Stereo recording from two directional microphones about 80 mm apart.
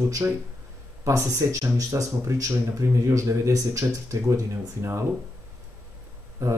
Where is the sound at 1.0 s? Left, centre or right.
Right.